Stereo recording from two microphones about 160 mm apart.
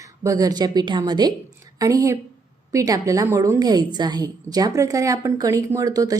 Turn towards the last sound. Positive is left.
turn(degrees=-20)  # may be behind; listen again after turning